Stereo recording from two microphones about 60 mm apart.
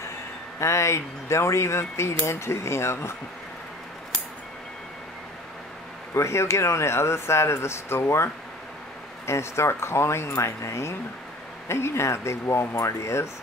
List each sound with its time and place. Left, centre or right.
0.6 s speech: left
6.1 s speech: left